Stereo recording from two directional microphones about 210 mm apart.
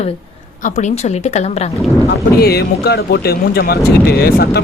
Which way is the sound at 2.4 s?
50° left (ahead or behind).